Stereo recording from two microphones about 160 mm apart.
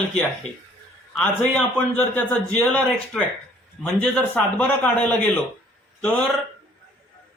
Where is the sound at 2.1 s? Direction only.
5° left (ahead or behind).